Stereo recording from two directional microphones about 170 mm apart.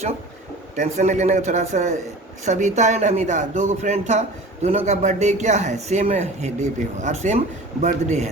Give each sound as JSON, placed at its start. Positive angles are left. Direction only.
{"t": 0.8, "sound": "a man's voice", "side_deg": -40}